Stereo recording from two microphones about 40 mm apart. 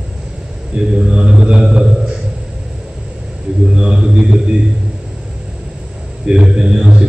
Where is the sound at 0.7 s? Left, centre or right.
Centre.